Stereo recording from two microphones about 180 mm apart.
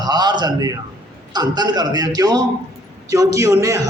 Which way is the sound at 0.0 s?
25° right (ahead or behind).